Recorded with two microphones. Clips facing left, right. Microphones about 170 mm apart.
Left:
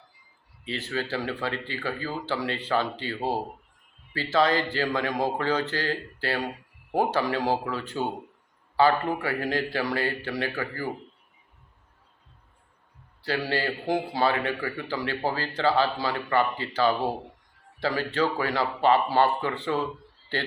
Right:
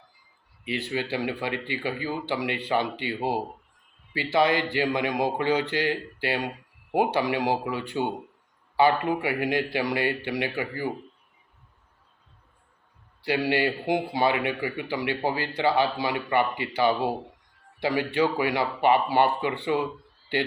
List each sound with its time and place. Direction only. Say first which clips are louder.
0.6 s a man's voice: right 2 dB; 15° right (ahead or behind)
13.2 s a man's voice: right 3 dB; 15° right (ahead or behind)